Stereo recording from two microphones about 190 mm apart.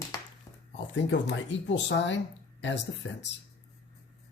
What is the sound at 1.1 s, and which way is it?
Speech, 70° left (ahead or behind).